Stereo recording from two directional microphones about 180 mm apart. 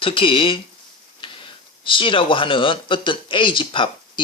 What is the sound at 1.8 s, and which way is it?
Speech, 30° left (ahead or behind).